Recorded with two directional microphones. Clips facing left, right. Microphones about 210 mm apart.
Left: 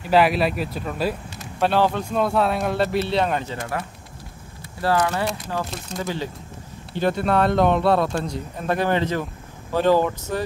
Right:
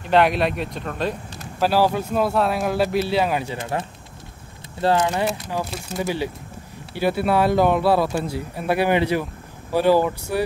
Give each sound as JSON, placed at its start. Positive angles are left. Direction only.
{"t": 0.0, "sound": "speech", "side_deg": 5}
{"t": 1.6, "sound": "speech", "side_deg": -5}
{"t": 3.5, "sound": "speech", "side_deg": -20}
{"t": 5.2, "sound": "speech", "side_deg": -10}